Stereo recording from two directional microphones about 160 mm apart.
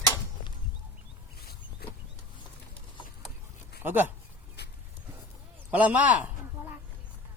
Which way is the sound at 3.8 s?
10° right (ahead or behind).